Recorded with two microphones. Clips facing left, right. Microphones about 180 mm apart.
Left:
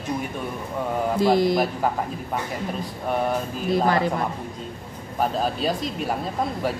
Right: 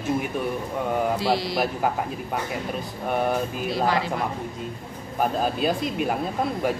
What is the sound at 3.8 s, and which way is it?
Speech, 45° left (ahead or behind).